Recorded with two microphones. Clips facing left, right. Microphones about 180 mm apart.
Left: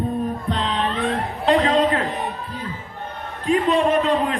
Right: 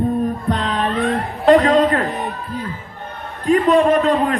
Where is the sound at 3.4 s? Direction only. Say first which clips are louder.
Right 5 dB; 45° right (ahead or behind).